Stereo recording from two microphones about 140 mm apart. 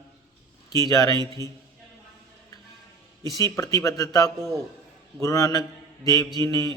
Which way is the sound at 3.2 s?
25° left (ahead or behind).